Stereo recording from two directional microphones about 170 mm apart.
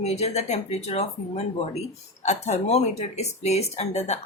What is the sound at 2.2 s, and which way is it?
Speech, 40° left (ahead or behind).